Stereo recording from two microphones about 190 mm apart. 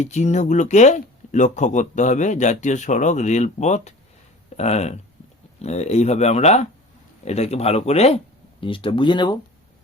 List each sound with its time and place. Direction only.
0.0 s speech: 40° left (ahead or behind)